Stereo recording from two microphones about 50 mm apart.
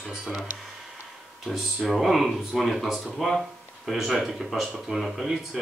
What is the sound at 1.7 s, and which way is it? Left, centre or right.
Speech, centre.